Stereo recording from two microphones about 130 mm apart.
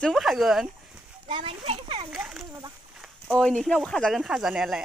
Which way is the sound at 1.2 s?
45° right (ahead or behind).